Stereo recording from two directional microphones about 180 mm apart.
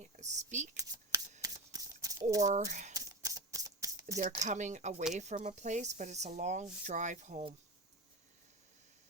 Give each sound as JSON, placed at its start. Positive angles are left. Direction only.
{"t": 0.0, "sound": "speech", "side_deg": -40}
{"t": 1.1, "sound": "shuffling cards", "side_deg": -15}
{"t": 2.0, "sound": "a sound", "side_deg": -20}
{"t": 2.4, "sound": "speech", "side_deg": -40}
{"t": 2.9, "sound": "a sound", "side_deg": -20}
{"t": 4.2, "sound": "speech", "side_deg": -40}